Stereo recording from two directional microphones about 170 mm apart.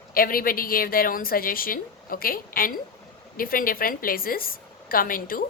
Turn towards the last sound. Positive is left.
turn(degrees=55)  # may be behind; listen again after turning